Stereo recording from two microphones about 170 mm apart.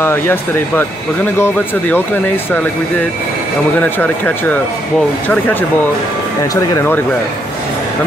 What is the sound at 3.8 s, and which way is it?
Speech, 10° left (ahead or behind).